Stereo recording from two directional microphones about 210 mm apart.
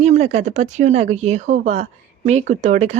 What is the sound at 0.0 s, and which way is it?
Speech, 35° right (ahead or behind).